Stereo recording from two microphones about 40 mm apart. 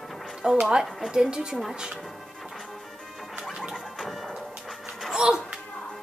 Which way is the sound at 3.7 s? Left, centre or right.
Centre.